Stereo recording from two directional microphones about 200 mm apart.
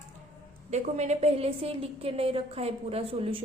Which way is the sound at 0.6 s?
35° right (ahead or behind).